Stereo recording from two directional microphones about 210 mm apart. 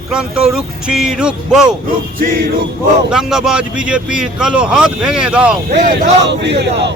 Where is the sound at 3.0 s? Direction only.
5° right (ahead or behind).